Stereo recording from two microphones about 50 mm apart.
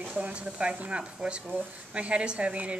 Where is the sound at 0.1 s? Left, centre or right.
Right.